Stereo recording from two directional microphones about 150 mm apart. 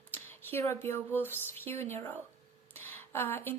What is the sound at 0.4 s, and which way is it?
A woman's voice, 15° left (ahead or behind).